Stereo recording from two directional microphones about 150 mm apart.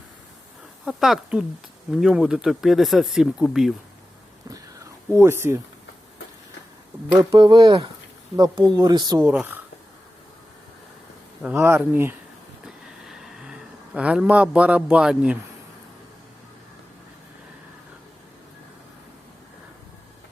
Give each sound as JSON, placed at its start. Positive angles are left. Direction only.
{"t": 0.9, "sound": "speech", "side_deg": 0}
{"t": 4.4, "sound": "a sound", "side_deg": -20}
{"t": 7.2, "sound": "speech", "side_deg": -25}
{"t": 9.2, "sound": "speech", "side_deg": -10}
{"t": 11.4, "sound": "speech", "side_deg": -15}
{"t": 12.6, "sound": "a sound", "side_deg": -5}